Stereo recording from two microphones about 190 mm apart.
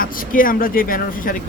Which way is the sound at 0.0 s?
45° left (ahead or behind).